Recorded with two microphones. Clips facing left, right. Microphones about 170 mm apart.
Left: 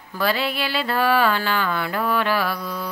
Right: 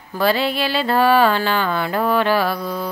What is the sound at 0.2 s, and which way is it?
Mantra, 30° right (ahead or behind).